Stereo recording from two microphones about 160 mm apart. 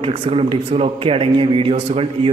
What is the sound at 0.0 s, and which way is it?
A man's voice, 35° right (ahead or behind).